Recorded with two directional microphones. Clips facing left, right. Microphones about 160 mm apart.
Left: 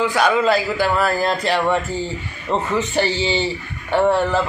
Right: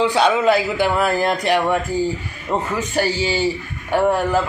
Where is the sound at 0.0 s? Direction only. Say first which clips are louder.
Right 1 dB; 25° right (ahead or behind).